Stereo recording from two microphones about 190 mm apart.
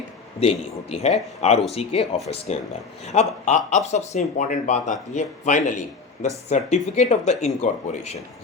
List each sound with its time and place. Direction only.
0.3 s speech: 35° left (ahead or behind)